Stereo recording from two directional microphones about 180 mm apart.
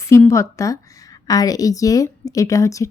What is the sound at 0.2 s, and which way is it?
A woman's voice, 15° left (ahead or behind).